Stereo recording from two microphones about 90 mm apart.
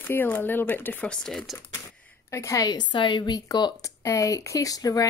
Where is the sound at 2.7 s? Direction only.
60° left (ahead or behind).